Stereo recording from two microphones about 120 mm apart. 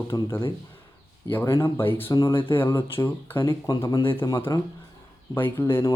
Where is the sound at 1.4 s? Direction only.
25° left (ahead or behind).